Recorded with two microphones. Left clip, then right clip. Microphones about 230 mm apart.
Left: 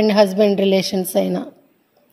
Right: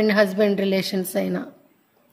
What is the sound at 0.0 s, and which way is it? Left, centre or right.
A woman's voice, centre.